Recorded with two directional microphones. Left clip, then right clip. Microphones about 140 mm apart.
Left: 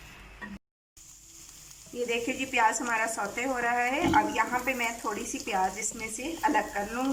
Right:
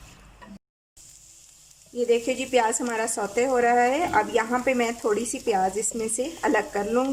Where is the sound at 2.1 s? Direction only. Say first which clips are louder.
Right 8 dB; 50° right (ahead or behind).